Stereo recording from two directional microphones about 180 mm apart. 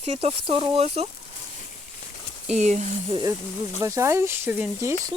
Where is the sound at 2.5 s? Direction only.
40° right (ahead or behind).